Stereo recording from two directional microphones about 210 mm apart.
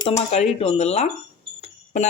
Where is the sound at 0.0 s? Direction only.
30° left (ahead or behind).